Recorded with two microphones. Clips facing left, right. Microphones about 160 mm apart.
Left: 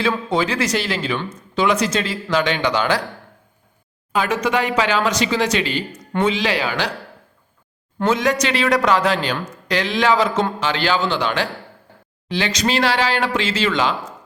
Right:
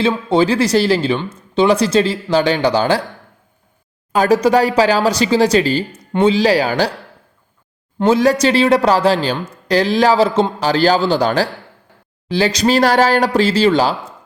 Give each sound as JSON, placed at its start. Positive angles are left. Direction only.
{"t": 0.0, "sound": "speech", "side_deg": -30}
{"t": 4.1, "sound": "speech", "side_deg": -40}
{"t": 7.9, "sound": "speech", "side_deg": -30}